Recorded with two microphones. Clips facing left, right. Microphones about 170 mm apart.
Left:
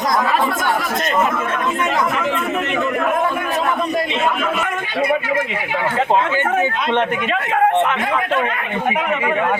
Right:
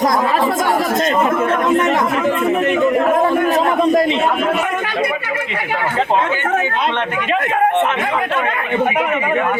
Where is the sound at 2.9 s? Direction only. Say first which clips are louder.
Right 5 dB; 35° right (ahead or behind).